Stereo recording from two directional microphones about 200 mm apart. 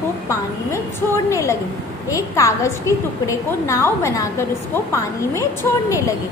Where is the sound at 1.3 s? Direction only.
15° left (ahead or behind).